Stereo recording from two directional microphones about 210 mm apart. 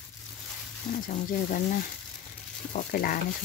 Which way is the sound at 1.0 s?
40° left (ahead or behind).